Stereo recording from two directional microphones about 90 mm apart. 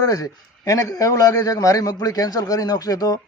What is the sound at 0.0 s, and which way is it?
A man's voice, 40° left (ahead or behind).